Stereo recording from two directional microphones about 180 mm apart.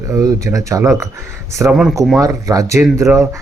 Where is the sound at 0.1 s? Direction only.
15° right (ahead or behind).